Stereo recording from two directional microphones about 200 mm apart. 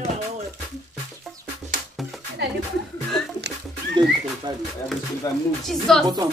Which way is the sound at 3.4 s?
60° right (ahead or behind).